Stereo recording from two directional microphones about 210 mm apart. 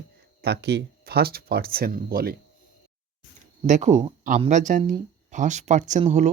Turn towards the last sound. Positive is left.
turn(degrees=-35)  # may be behind; listen again after turning